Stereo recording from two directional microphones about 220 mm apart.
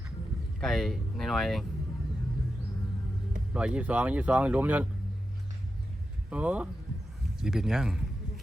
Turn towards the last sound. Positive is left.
turn(degrees=-5)  # may be behind; listen again after turning